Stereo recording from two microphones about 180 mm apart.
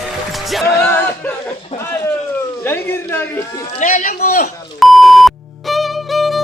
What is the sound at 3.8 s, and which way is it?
Speech, 45° left (ahead or behind).